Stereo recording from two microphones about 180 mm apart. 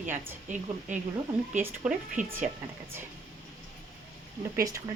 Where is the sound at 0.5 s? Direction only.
45° right (ahead or behind).